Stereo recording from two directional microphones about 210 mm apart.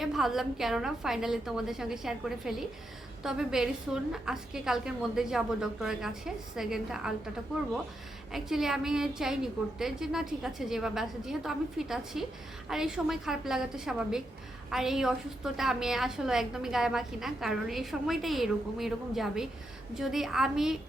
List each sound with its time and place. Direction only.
0.0 s a woman's voice: centre (ahead or behind)
8.3 s a woman's voice: centre (ahead or behind)